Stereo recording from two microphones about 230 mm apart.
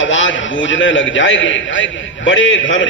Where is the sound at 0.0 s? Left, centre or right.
Left.